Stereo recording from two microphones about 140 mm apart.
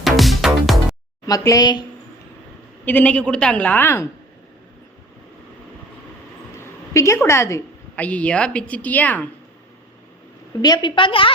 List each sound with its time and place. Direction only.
0.0 s music: centre (ahead or behind)
1.3 s speech: 25° left (ahead or behind)
2.8 s a woman's voice: 10° left (ahead or behind)
6.6 s a woman's voice: 20° left (ahead or behind)
10.6 s a woman's voice: 30° left (ahead or behind)